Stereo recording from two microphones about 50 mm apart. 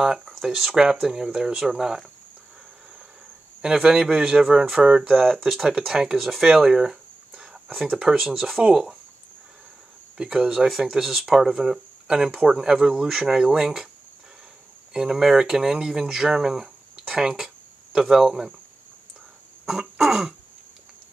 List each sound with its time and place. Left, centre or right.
0.4 s speech: centre
3.6 s speech: centre
4.7 s speech: centre
5.1 s speech: centre
5.5 s speech: centre
10.1 s speech: centre
11.0 s speech: centre
14.9 s speech: centre
16.9 s speech: right
19.6 s cough: centre